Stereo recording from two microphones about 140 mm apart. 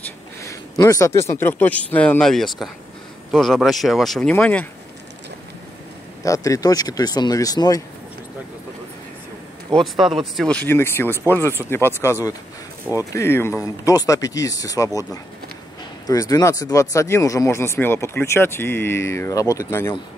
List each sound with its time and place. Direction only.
0.4 s speech: 25° left (ahead or behind)
6.2 s speech: 25° left (ahead or behind)
9.8 s speech: centre (ahead or behind); by 15.0 s 25° left (ahead or behind)
16.1 s speech: 25° left (ahead or behind)